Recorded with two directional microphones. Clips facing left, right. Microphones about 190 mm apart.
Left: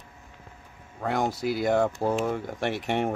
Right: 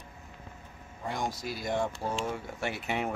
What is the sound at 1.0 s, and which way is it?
Speech, 65° left (ahead or behind).